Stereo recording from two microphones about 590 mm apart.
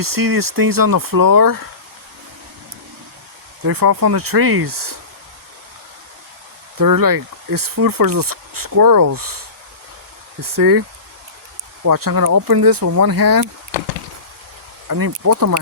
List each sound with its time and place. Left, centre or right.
0.0 s speech: right
3.7 s speech: right
6.7 s speech: right
10.4 s speech: right
14.8 s speech: right